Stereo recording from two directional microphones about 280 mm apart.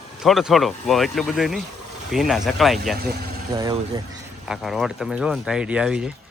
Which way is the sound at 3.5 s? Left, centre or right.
Centre.